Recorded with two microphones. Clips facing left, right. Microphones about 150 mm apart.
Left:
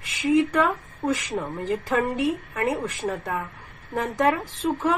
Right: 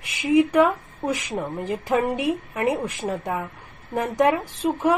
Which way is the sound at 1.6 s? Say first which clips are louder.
Right 2 dB; 20° right (ahead or behind).